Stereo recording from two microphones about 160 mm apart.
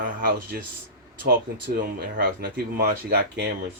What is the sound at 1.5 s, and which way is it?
Speech, 70° right (ahead or behind).